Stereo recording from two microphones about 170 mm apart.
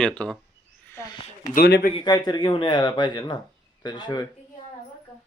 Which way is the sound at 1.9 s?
25° left (ahead or behind).